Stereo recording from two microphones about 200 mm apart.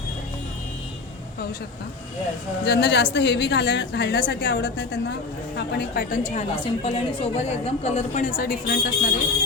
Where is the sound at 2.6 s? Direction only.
55° left (ahead or behind).